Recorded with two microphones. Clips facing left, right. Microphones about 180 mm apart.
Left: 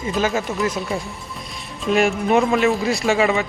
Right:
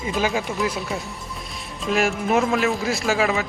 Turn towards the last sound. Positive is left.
turn(degrees=0)  # may be behind; listen again after turning